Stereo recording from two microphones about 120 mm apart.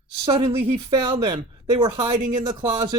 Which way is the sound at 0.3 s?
50° right (ahead or behind).